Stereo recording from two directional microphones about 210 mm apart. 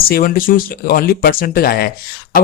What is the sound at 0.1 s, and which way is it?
Speech, 45° left (ahead or behind).